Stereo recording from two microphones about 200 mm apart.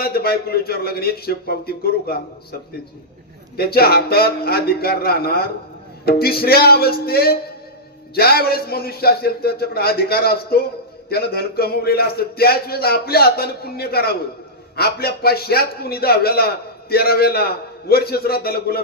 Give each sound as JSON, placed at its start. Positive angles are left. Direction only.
{"t": 0.0, "sound": "speech", "side_deg": 50}
{"t": 3.6, "sound": "speech", "side_deg": 50}